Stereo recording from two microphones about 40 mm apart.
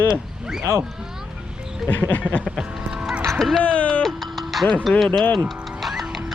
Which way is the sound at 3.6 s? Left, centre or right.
Left.